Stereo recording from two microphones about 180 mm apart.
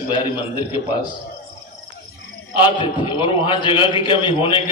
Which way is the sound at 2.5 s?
25° left (ahead or behind).